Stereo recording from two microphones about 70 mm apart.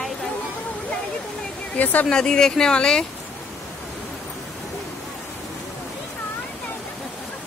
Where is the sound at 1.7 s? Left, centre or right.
Left.